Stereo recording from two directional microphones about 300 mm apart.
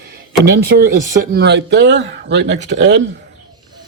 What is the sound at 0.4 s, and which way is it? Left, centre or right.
Speech, right.